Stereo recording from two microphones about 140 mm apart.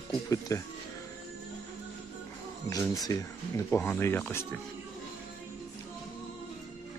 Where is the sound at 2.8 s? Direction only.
25° left (ahead or behind).